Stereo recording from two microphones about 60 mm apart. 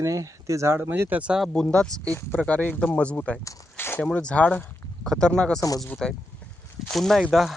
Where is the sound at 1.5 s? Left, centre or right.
Centre.